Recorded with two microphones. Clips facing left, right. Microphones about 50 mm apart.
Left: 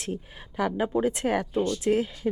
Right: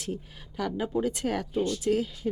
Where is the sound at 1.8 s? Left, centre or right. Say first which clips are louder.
Left 3 dB; left.